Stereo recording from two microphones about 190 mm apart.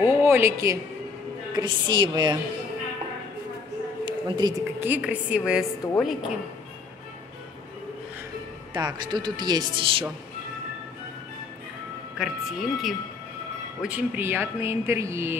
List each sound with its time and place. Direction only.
0.2 s a sound: 10° right (ahead or behind)
1.5 s speech: 25° right (ahead or behind)
4.0 s a woman's voice: 25° right (ahead or behind)
4.8 s a woman's voice: 10° right (ahead or behind)
8.7 s speech: 25° right (ahead or behind)
12.2 s a woman's voice: centre (ahead or behind)